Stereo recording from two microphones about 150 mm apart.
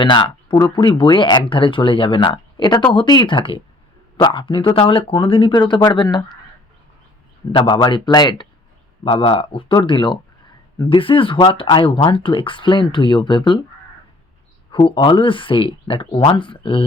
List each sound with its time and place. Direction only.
0.0 s speech: 30° left (ahead or behind)
7.5 s speech: 30° left (ahead or behind)
14.7 s speech: 35° left (ahead or behind)